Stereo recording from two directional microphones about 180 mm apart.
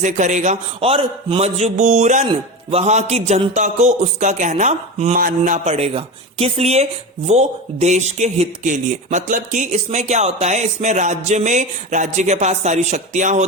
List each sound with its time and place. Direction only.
0.0 s speech: 40° right (ahead or behind)
2.2 s speech: 30° right (ahead or behind)
5.1 s a sound: 50° right (ahead or behind)
5.6 s speech: 35° right (ahead or behind)